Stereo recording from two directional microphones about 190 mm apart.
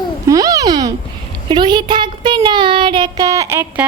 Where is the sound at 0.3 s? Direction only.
20° right (ahead or behind).